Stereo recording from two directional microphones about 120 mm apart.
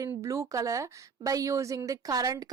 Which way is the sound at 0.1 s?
25° right (ahead or behind).